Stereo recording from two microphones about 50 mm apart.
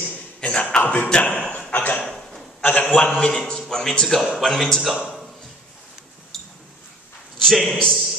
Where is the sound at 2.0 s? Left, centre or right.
Centre.